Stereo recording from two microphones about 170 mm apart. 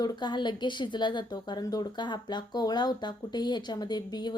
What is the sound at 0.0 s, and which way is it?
Speech, 25° left (ahead or behind).